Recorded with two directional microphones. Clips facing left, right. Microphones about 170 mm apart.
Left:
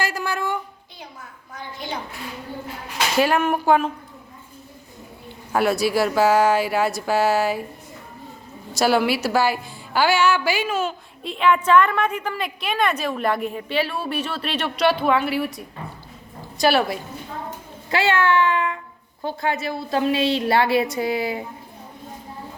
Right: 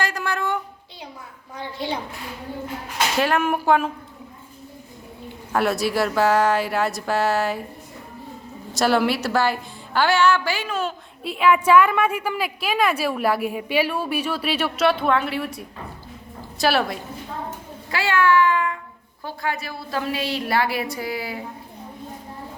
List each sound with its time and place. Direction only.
0.0 s a sound: 5° left (ahead or behind)
1.5 s a woman's voice: 30° right (ahead or behind)
3.2 s a woman's voice: 5° left (ahead or behind)
5.5 s a woman's voice: centre (ahead or behind)
8.7 s a woman's voice: centre (ahead or behind)
16.6 s a woman's voice: centre (ahead or behind)
17.9 s a woman's voice: 25° left (ahead or behind)